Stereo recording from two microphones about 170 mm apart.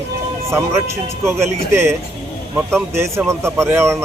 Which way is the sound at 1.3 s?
15° right (ahead or behind).